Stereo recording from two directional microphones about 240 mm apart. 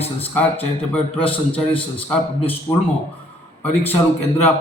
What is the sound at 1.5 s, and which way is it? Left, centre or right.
Speech, left.